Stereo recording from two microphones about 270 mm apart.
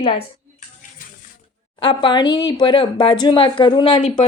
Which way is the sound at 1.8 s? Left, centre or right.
Centre.